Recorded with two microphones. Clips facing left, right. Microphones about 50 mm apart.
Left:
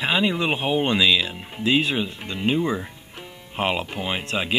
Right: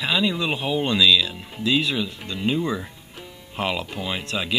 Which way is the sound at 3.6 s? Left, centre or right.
Left.